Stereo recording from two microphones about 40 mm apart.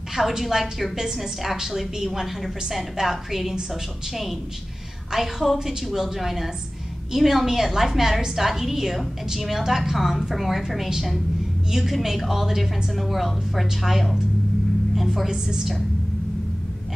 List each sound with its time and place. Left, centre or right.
0.3 s a woman's voice: centre
15.2 s a woman's voice: centre